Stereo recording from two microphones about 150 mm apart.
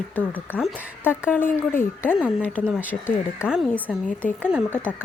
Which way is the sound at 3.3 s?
5° right (ahead or behind).